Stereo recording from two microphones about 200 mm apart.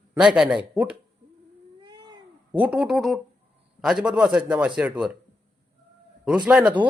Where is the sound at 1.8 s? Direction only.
20° right (ahead or behind).